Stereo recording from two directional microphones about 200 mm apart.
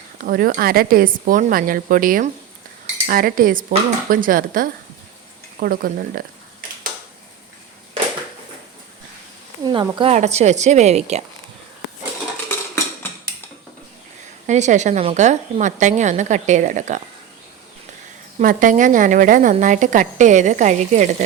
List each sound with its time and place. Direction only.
0.3 s a woman's voice: 45° right (ahead or behind)
9.6 s speech: 25° right (ahead or behind)
12.5 s dishes: 10° left (ahead or behind)
14.4 s speech: 35° right (ahead or behind)
18.3 s speech: 40° right (ahead or behind)